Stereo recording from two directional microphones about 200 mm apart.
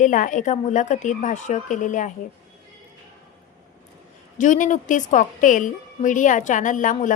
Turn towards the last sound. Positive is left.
turn(degrees=40)  # may be behind; listen again after turning